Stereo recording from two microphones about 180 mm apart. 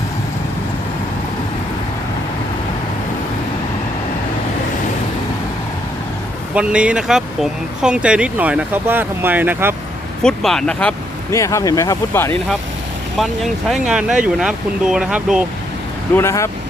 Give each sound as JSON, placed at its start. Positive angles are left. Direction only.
{"t": 6.5, "sound": "speech", "side_deg": -5}
{"t": 10.2, "sound": "speech", "side_deg": 5}
{"t": 11.3, "sound": "speech", "side_deg": 15}
{"t": 13.1, "sound": "speech", "side_deg": 0}
{"t": 16.1, "sound": "speech", "side_deg": 15}